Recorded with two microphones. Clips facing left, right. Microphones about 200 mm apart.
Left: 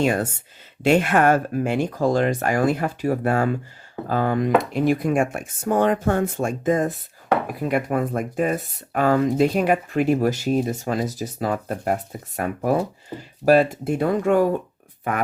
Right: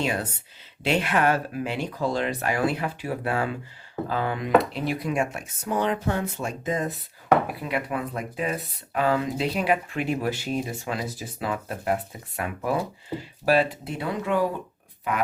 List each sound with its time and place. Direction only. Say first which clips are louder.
0.0 s speech: left 6 dB; 50° left (ahead or behind)